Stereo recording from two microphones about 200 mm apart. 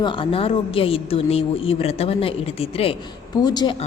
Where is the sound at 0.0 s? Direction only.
25° left (ahead or behind).